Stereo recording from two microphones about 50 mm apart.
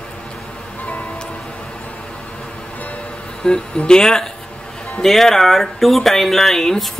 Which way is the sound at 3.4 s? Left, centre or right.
Centre.